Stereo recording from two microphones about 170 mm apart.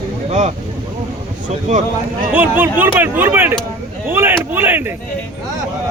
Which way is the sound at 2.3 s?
10° right (ahead or behind).